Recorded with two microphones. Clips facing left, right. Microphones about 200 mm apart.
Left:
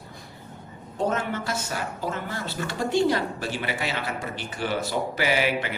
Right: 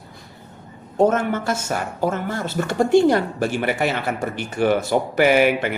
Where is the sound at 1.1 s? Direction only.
50° right (ahead or behind).